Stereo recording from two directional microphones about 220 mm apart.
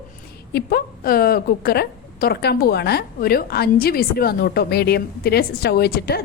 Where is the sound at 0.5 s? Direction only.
45° left (ahead or behind).